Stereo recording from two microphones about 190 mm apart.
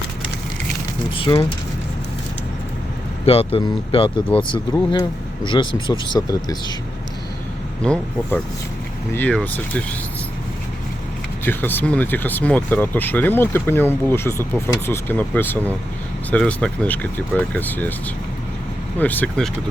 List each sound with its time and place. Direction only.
1.1 s speech: 25° left (ahead or behind)
3.2 s speech: 30° left (ahead or behind)
7.8 s speech: 5° left (ahead or behind)
11.4 s speech: 10° left (ahead or behind)
18.9 s speech: 10° left (ahead or behind)